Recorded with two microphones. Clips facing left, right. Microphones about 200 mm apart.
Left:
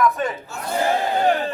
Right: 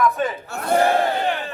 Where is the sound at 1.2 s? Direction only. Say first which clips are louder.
Left 5 dB; 40° left (ahead or behind).